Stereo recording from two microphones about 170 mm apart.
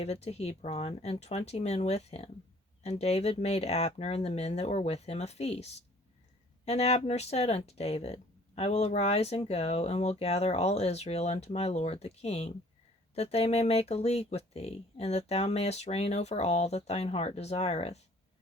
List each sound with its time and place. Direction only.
0.0 s speech: 40° left (ahead or behind)